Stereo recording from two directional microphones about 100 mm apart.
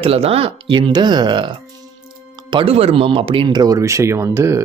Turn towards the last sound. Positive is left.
turn(degrees=-30)  # may be behind; listen again after turning